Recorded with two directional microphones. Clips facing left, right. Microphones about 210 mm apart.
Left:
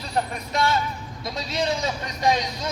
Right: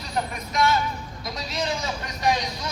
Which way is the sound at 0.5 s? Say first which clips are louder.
Right 1 dB; 30° left (ahead or behind).